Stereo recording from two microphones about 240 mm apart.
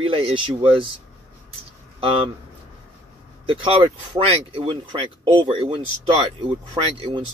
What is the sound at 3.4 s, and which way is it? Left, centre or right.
Speech, right.